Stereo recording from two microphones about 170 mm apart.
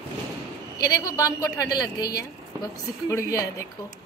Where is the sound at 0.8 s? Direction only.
20° left (ahead or behind).